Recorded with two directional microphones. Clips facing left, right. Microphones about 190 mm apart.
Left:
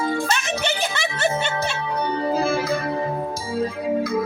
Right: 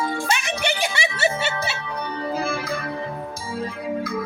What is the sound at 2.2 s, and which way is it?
Organ, 35° left (ahead or behind).